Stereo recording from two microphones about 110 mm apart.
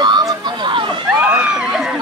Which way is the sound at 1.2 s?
10° right (ahead or behind).